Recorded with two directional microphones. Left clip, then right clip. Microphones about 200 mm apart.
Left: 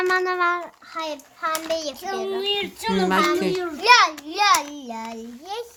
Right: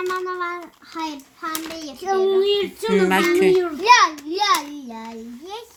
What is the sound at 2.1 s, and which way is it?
Speech, 30° left (ahead or behind).